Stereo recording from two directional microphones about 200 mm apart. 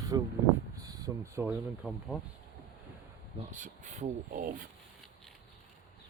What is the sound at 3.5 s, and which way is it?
Speech, 40° right (ahead or behind).